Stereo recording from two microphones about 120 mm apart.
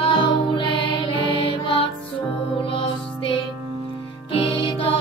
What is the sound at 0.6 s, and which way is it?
Music, 40° left (ahead or behind).